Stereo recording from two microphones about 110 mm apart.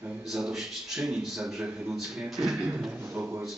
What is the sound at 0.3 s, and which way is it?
A man's voice, 5° right (ahead or behind).